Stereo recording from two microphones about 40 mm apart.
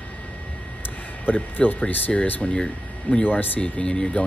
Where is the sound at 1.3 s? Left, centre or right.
Left.